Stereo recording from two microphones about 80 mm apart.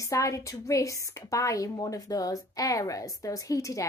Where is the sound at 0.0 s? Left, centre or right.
Left.